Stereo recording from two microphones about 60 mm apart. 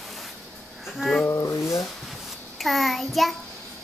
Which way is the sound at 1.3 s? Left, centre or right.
Left.